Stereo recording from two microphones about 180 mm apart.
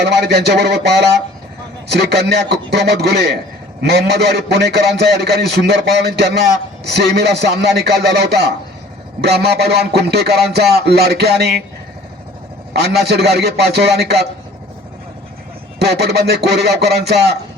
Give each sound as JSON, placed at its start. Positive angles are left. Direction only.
{"t": 0.0, "sound": "a man's voice", "side_deg": -70}
{"t": 12.7, "sound": "a man's voice", "side_deg": -65}
{"t": 15.8, "sound": "a man's voice", "side_deg": -65}